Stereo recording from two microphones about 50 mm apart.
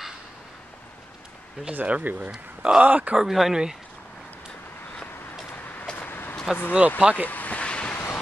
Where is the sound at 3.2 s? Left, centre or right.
Centre.